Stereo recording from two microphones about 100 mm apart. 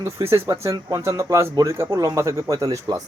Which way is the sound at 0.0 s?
25° right (ahead or behind).